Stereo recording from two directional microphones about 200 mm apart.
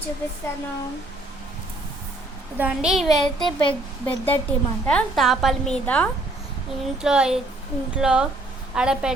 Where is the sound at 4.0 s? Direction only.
10° left (ahead or behind).